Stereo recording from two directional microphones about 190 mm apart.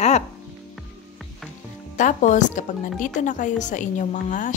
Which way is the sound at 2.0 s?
40° left (ahead or behind).